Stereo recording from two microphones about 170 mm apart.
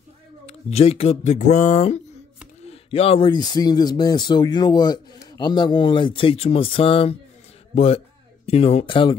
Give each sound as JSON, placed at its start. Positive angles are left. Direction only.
{"t": 0.5, "sound": "a man's voice", "side_deg": 35}